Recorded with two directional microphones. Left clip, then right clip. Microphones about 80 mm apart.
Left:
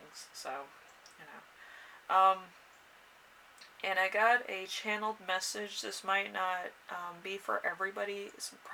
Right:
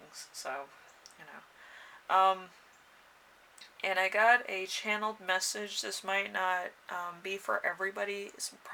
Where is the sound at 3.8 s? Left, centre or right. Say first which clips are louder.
Right 2 dB; right.